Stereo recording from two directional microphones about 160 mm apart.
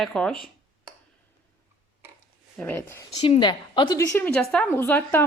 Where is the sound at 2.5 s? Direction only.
10° left (ahead or behind).